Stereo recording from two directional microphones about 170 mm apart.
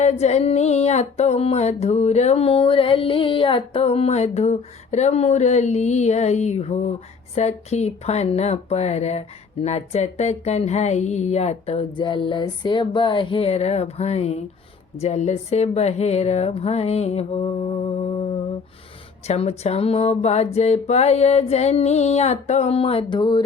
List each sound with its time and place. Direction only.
0.0 s speech: 40° left (ahead or behind)
19.3 s speech: 40° left (ahead or behind)